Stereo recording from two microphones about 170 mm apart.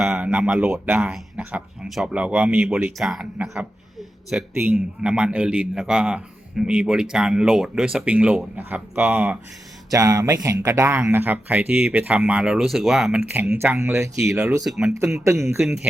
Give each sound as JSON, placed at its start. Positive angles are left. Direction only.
{"t": 0.0, "sound": "a man's voice", "side_deg": -5}
{"t": 9.9, "sound": "a man's voice", "side_deg": -20}
{"t": 14.6, "sound": "speech", "side_deg": 0}
{"t": 14.9, "sound": "a man's voice", "side_deg": -15}